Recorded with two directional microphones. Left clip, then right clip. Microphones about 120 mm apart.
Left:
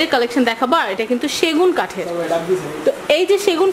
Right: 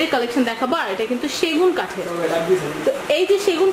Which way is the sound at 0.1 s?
45° left (ahead or behind).